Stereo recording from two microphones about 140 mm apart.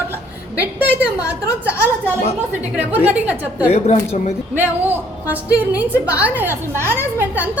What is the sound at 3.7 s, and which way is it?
Speech, 50° left (ahead or behind).